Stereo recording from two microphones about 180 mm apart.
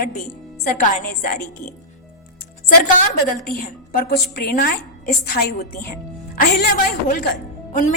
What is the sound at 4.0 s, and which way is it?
A woman's voice, 60° left (ahead or behind).